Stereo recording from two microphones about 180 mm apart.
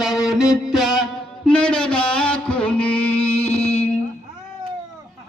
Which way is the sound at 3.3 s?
35° left (ahead or behind).